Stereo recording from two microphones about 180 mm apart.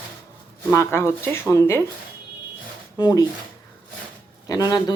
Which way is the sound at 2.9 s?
20° left (ahead or behind).